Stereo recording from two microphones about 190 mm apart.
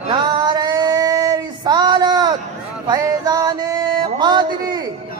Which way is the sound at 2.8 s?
20° right (ahead or behind).